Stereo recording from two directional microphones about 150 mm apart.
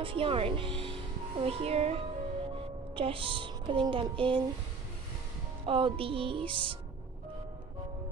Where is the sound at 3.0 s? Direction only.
35° right (ahead or behind).